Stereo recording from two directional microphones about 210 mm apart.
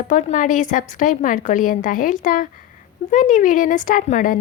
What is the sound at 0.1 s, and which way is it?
A woman's voice, 35° left (ahead or behind).